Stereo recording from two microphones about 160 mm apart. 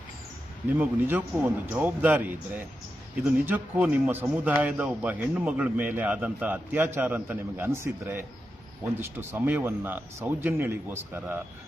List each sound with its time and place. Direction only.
0.8 s a man's voice: 10° right (ahead or behind)